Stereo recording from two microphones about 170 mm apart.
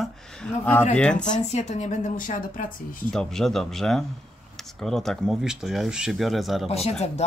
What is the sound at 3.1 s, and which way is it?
Speech, centre (ahead or behind).